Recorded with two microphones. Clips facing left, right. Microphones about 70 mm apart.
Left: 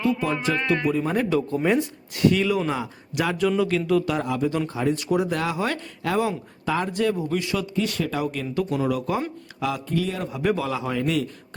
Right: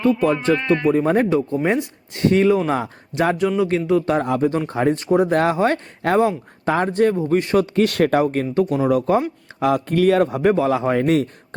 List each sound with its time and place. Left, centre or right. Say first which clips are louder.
0.1 s speech: right 7 dB; centre
0.9 s speech: right 7 dB; right
1.3 s speech: right 3 dB; right
2.2 s speech: right 5 dB; right
3.6 s speech: right 4 dB; right
4.0 s speech: right 6 dB; right
7.8 s speech: right 8 dB; right
10.4 s speech: right 7 dB; right